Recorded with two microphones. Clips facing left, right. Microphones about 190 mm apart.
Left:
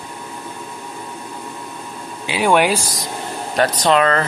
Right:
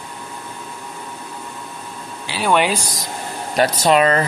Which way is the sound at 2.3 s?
15° left (ahead or behind).